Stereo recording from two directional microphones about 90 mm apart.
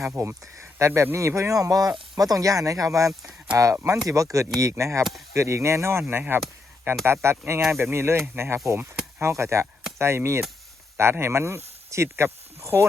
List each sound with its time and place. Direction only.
0.2 s speech: 30° right (ahead or behind)
1.6 s speech: 45° right (ahead or behind)
3.1 s speech: 15° right (ahead or behind)
4.0 s speech: 35° right (ahead or behind)